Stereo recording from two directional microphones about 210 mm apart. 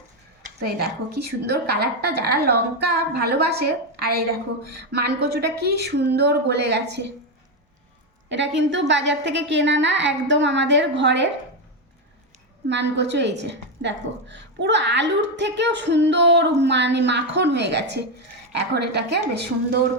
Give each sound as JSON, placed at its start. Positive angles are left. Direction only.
{"t": 0.6, "sound": "a woman's voice", "side_deg": -50}
{"t": 8.3, "sound": "a woman's voice", "side_deg": -55}
{"t": 12.6, "sound": "a woman's voice", "side_deg": -55}